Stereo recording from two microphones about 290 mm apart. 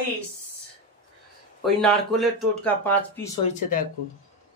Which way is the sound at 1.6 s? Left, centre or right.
Centre.